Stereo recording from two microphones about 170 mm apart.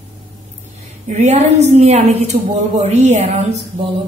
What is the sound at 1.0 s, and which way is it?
A woman's voice, 40° right (ahead or behind).